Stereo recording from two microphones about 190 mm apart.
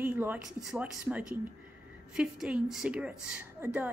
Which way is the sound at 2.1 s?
5° right (ahead or behind).